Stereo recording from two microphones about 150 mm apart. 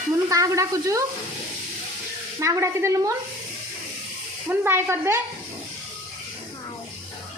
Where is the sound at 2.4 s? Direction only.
20° right (ahead or behind).